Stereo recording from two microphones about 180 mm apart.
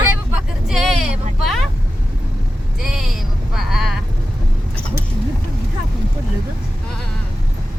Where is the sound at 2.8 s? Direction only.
Centre (ahead or behind).